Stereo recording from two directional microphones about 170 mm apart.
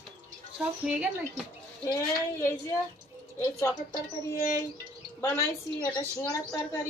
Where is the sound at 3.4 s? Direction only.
15° left (ahead or behind).